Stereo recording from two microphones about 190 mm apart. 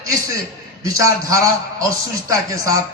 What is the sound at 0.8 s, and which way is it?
A man's voice, 15° right (ahead or behind).